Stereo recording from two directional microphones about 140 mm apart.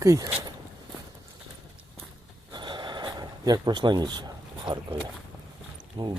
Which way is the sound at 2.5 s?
35° right (ahead or behind).